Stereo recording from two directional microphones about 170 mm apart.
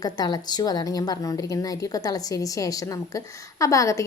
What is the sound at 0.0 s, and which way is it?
A woman's voice, 25° left (ahead or behind).